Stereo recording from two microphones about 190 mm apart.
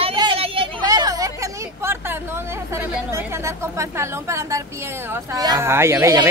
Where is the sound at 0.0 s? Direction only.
25° right (ahead or behind).